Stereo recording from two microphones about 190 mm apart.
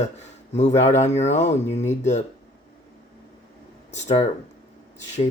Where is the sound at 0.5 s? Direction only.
35° left (ahead or behind).